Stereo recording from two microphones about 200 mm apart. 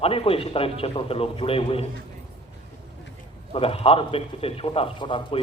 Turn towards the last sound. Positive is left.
turn(degrees=25)  # may be behind; listen again after turning